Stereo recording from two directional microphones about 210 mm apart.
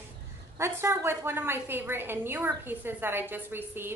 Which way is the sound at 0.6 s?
10° right (ahead or behind).